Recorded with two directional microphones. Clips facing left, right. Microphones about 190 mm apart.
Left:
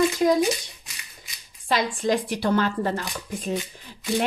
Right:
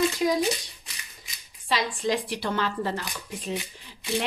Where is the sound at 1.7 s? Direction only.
50° left (ahead or behind).